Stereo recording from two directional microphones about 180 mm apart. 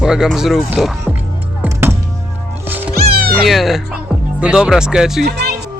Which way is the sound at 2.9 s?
55° right (ahead or behind).